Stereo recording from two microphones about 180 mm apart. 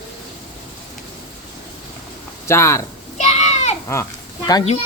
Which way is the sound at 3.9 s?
20° left (ahead or behind).